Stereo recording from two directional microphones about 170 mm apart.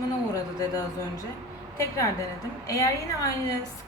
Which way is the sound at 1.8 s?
20° left (ahead or behind).